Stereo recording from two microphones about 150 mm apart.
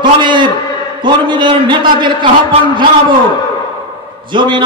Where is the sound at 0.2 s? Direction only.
30° right (ahead or behind).